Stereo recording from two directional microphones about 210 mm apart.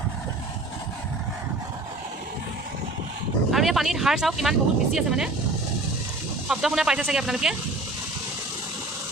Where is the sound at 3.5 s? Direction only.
Centre (ahead or behind).